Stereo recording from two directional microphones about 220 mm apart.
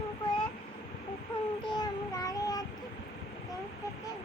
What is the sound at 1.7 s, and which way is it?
Child singing, 15° left (ahead or behind).